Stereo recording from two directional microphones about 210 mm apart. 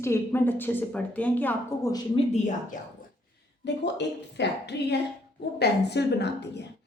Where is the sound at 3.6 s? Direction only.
55° left (ahead or behind).